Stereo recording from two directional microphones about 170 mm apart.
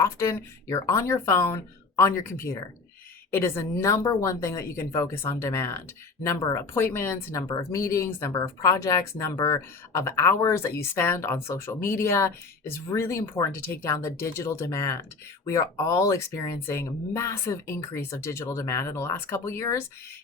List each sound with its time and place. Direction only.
0.0 s speech: 15° left (ahead or behind)